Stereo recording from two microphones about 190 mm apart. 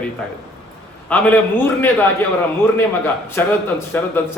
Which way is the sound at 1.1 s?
10° left (ahead or behind).